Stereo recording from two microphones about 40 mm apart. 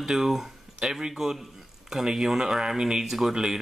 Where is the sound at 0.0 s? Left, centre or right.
Centre.